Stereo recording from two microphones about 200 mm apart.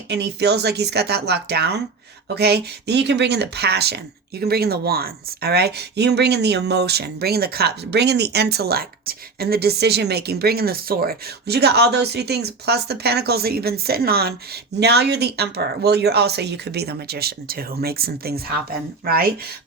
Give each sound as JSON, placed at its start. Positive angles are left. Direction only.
{"t": 0.1, "sound": "speech", "side_deg": -55}